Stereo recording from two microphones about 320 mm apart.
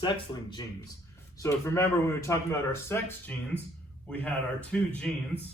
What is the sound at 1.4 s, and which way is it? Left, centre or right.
A man's voice, centre.